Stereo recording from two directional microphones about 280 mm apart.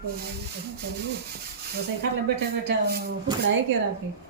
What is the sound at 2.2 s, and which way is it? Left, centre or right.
Speech, right.